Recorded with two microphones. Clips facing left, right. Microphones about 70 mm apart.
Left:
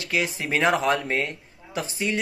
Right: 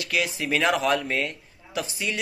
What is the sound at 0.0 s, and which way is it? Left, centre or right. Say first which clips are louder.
A man's voice: even; left.